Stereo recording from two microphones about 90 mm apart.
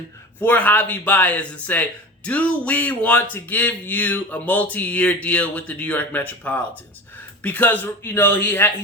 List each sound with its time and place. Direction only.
0.3 s speech: 20° left (ahead or behind)